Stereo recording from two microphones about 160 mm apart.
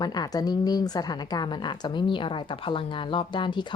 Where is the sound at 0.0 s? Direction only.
25° left (ahead or behind).